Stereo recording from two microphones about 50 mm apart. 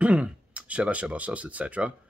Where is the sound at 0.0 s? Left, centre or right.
Right.